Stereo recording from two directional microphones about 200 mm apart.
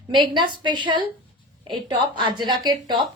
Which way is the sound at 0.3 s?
25° right (ahead or behind).